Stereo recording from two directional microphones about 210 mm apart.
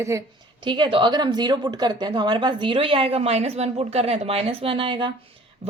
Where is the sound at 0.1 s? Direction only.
15° right (ahead or behind).